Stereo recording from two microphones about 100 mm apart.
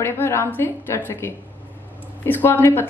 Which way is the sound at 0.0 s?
25° left (ahead or behind).